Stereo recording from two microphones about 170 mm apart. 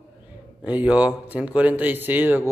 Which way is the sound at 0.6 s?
10° right (ahead or behind).